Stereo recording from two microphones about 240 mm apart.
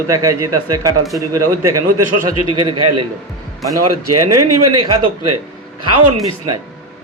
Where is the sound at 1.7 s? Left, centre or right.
Right.